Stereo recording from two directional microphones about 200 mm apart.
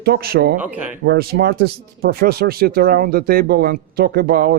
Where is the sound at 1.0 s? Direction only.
50° right (ahead or behind).